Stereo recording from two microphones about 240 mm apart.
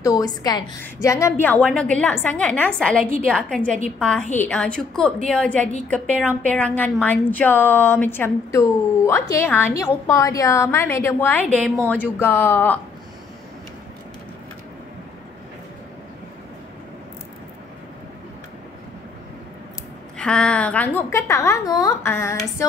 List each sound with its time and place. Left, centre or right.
0.0 s a woman's voice: centre
20.2 s a woman's voice: centre